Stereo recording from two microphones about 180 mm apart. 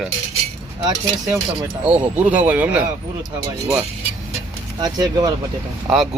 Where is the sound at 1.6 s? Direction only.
10° right (ahead or behind).